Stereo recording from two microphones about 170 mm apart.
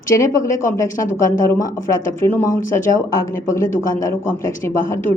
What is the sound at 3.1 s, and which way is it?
A woman's voice, 15° left (ahead or behind).